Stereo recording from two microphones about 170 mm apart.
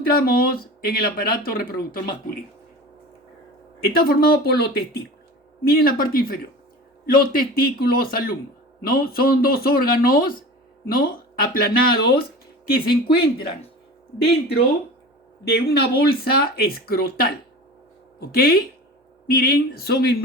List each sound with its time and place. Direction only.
0.1 s speech: 60° left (ahead or behind)
3.9 s speech: 60° left (ahead or behind)
15.4 s speech: 65° left (ahead or behind)